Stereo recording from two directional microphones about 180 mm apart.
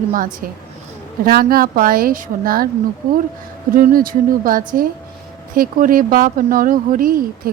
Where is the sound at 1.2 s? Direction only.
55° right (ahead or behind).